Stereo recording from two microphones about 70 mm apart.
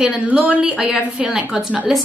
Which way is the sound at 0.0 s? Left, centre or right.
Right.